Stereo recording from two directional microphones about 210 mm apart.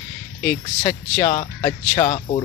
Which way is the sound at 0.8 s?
20° left (ahead or behind).